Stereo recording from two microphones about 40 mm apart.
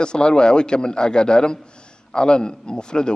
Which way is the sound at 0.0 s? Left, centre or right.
Left.